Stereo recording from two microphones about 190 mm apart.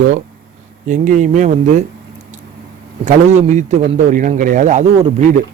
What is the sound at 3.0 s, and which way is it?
A man's voice, 35° right (ahead or behind).